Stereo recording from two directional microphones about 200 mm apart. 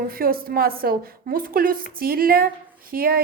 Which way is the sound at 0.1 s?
45° right (ahead or behind).